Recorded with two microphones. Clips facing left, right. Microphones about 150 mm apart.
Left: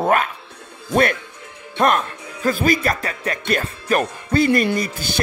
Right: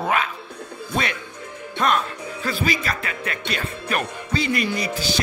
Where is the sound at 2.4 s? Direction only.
50° left (ahead or behind).